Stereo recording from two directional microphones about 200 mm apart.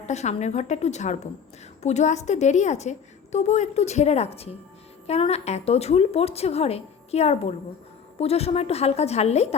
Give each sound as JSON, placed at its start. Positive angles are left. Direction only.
{"t": 0.0, "sound": "a woman's voice", "side_deg": 35}